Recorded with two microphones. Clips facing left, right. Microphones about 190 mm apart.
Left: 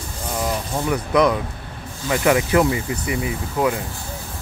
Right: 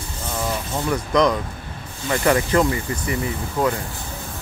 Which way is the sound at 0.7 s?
10° left (ahead or behind).